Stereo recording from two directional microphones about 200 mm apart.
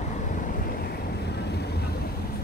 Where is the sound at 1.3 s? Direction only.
55° left (ahead or behind).